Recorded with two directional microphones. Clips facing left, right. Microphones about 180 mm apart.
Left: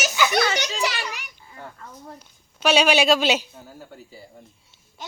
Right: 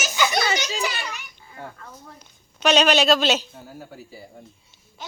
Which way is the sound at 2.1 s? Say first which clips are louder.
Left 2 dB; 5° left (ahead or behind).